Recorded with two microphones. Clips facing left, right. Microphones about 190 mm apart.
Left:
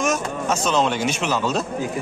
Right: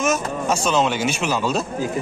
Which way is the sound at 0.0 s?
5° right (ahead or behind).